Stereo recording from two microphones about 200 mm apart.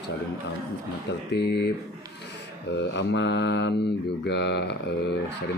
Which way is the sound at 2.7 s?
60° left (ahead or behind).